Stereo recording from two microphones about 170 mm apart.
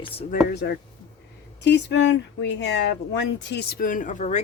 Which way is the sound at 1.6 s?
90° left.